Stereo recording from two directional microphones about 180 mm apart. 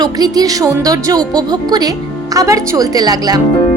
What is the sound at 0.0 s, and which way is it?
Speech, 20° right (ahead or behind).